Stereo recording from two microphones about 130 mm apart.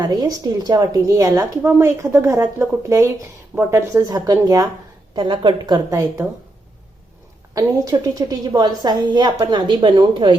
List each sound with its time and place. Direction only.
0.0 s speech: 30° right (ahead or behind)
5.1 s a woman's voice: 40° right (ahead or behind)
5.9 s speech: 25° right (ahead or behind)
7.5 s a woman's voice: 30° right (ahead or behind)